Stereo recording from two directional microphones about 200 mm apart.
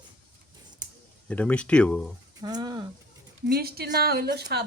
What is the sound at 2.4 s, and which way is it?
Speech, 20° right (ahead or behind).